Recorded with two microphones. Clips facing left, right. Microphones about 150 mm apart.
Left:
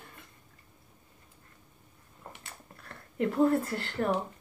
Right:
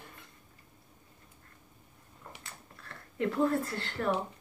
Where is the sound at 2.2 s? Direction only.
30° left (ahead or behind).